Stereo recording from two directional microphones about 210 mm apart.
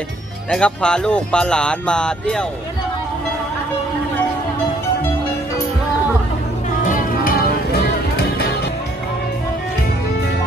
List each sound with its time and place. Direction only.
0.5 s speech: 5° left (ahead or behind)
6.9 s music: 40° left (ahead or behind)